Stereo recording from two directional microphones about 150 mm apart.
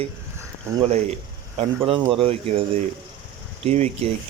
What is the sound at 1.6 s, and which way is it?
Speech, 35° right (ahead or behind).